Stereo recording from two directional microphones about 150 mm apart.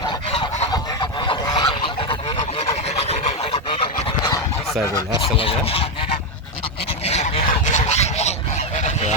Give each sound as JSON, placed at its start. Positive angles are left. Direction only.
{"t": 0.1, "sound": "fowl", "side_deg": 40}
{"t": 0.7, "sound": "goose", "side_deg": 30}
{"t": 5.2, "sound": "rub", "side_deg": 40}
{"t": 7.0, "sound": "goose", "side_deg": 45}